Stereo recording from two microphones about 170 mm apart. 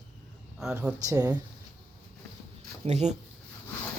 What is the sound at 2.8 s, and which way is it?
Speech, 40° right (ahead or behind).